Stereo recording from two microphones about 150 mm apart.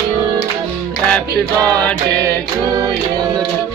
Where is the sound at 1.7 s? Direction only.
10° left (ahead or behind).